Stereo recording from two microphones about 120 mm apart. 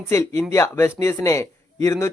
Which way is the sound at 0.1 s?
25° left (ahead or behind).